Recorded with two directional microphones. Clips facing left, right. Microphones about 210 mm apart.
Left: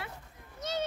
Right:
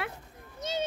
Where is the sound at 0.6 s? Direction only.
25° right (ahead or behind).